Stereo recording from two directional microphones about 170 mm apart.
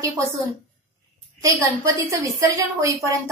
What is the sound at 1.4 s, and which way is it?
Speech, 20° right (ahead or behind).